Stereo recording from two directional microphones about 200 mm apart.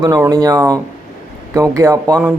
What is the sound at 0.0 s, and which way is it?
Speech, 15° right (ahead or behind).